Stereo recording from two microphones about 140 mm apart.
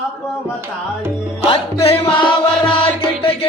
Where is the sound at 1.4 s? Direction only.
45° left (ahead or behind).